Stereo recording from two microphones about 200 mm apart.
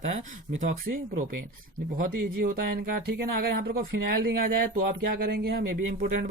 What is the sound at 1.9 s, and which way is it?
Speech, 50° right (ahead or behind).